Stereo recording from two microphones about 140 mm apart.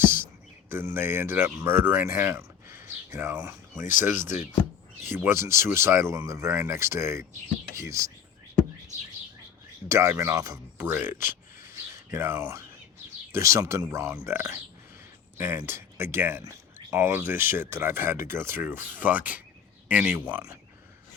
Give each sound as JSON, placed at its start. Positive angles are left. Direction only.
{"t": 0.0, "sound": "a sound", "side_deg": -15}
{"t": 0.7, "sound": "speech", "side_deg": -15}
{"t": 9.9, "sound": "speech", "side_deg": -20}